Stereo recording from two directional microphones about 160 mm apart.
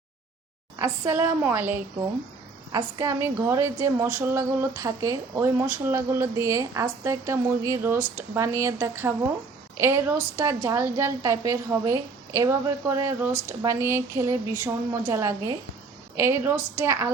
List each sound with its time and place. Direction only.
0.8 s a woman's voice: 15° right (ahead or behind)